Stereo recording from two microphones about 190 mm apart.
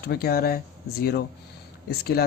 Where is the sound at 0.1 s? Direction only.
55° left (ahead or behind).